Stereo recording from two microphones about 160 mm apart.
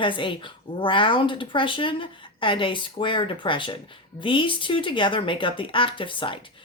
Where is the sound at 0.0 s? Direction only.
30° left (ahead or behind).